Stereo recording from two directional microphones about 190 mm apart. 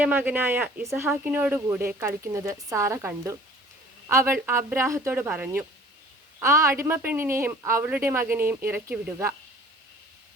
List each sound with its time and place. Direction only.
0.0 s speech: 10° right (ahead or behind)